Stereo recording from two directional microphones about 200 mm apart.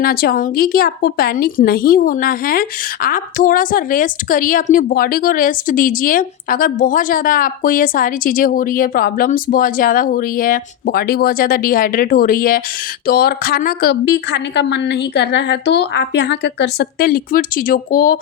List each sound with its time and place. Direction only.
0.0 s a woman's voice: 50° left (ahead or behind)